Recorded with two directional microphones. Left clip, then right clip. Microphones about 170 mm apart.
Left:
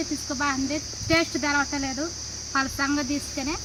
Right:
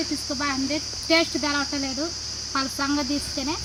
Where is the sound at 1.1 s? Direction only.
10° right (ahead or behind).